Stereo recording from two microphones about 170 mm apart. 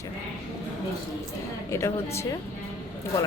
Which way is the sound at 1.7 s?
15° left (ahead or behind).